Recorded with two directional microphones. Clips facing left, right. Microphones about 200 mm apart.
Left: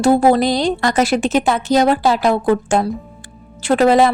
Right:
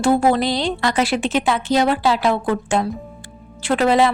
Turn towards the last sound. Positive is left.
turn(degrees=45)  # may be behind; listen again after turning